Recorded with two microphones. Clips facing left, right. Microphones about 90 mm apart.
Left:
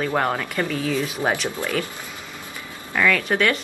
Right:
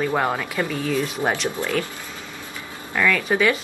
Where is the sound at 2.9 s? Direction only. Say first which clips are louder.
Even; centre (ahead or behind).